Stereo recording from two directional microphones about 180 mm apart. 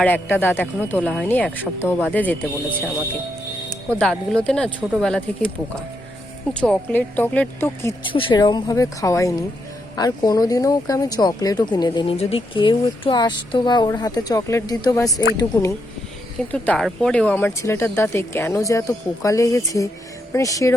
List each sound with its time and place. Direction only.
0.0 s speech: 10° left (ahead or behind)
3.9 s speech: 5° left (ahead or behind)
6.5 s speech: 5° left (ahead or behind)
8.0 s speech: 30° left (ahead or behind)
12.1 s speech: 35° left (ahead or behind); by 15.7 s 15° left (ahead or behind)
16.5 s speech: 5° left (ahead or behind)